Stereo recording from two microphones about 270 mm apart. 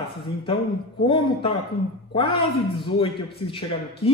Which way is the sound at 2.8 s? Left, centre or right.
Centre.